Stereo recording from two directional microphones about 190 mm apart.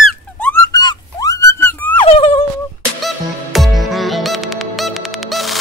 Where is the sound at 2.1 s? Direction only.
35° left (ahead or behind).